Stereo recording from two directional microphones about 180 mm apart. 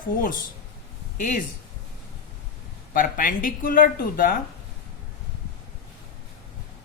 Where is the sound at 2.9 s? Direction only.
50° left (ahead or behind).